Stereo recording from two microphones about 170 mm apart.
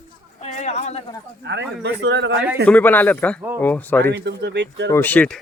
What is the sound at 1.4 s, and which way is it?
Speech, 90° right.